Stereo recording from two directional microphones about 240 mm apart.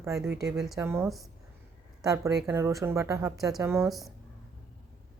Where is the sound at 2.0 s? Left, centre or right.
Centre.